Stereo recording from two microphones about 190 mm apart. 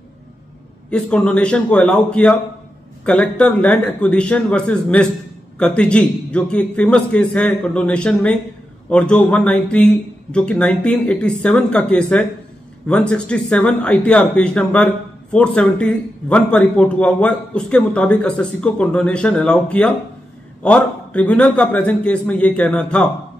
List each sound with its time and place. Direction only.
0.8 s a man's voice: 5° left (ahead or behind)